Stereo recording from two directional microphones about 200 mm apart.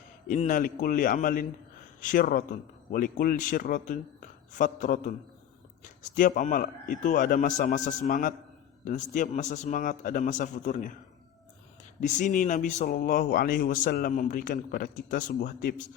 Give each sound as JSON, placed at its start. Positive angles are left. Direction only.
{"t": 0.3, "sound": "a man's voice", "side_deg": 40}
{"t": 11.9, "sound": "speech", "side_deg": 40}